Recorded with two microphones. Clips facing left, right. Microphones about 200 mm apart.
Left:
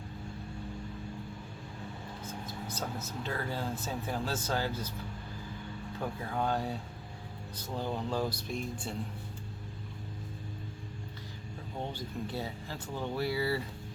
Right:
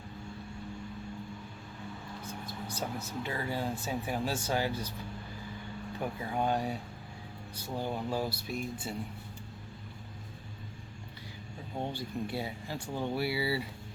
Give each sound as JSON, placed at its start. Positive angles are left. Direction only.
{"t": 2.6, "sound": "speech", "side_deg": -15}
{"t": 6.0, "sound": "speech", "side_deg": -15}
{"t": 11.8, "sound": "speech", "side_deg": -15}